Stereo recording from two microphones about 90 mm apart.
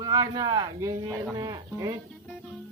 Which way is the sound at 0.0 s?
45° right (ahead or behind).